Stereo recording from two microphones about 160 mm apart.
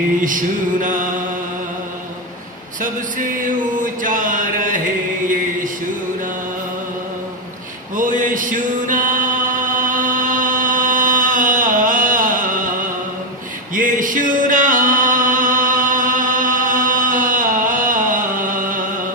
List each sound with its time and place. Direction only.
0.2 s mantra: 55° right (ahead or behind)
2.8 s a sound: 55° right (ahead or behind)
7.9 s chant: 55° right (ahead or behind)
13.7 s music: 55° right (ahead or behind)